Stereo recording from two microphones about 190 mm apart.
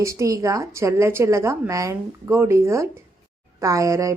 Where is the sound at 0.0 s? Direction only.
15° right (ahead or behind).